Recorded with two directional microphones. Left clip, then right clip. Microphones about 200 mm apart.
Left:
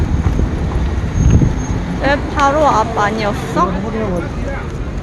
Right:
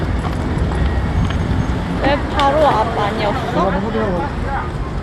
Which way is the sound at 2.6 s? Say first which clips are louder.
Left 2 dB; 25° left (ahead or behind).